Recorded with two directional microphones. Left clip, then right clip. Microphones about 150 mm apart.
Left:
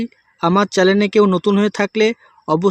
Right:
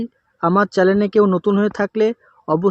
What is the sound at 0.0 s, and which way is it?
Speech, 20° left (ahead or behind).